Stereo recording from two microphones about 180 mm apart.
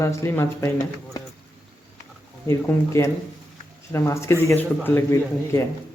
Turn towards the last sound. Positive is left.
turn(degrees=15)  # may be behind; listen again after turning